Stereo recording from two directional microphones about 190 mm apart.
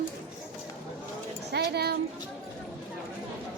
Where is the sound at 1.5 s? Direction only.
60° right (ahead or behind).